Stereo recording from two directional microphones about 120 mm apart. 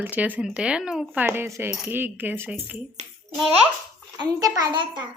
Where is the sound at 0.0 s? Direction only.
15° right (ahead or behind).